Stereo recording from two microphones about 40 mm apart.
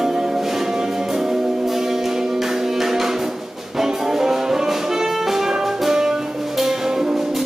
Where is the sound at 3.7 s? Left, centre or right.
Centre.